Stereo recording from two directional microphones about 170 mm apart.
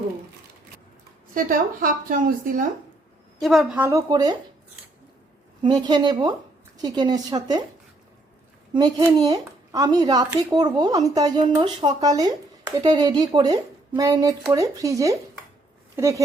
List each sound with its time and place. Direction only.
1.3 s a woman's voice: 55° right (ahead or behind)
3.4 s a woman's voice: centre (ahead or behind)
3.8 s speech: 20° right (ahead or behind)
5.6 s speech: 25° right (ahead or behind)
8.7 s speech: 25° right (ahead or behind)